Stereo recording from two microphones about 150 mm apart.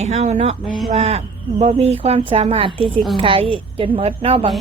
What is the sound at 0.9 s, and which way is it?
A woman's voice, 45° right (ahead or behind).